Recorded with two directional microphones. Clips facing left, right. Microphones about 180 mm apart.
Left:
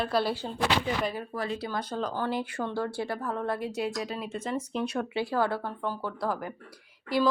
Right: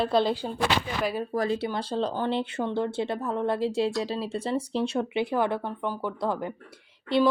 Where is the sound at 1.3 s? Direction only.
40° right (ahead or behind).